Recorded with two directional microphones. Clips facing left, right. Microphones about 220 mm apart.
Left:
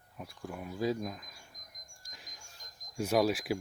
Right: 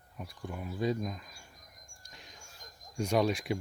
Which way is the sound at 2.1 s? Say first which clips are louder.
Right 2 dB; 5° left (ahead or behind).